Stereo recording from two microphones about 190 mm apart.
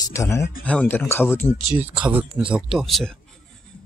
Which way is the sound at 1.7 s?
5° right (ahead or behind).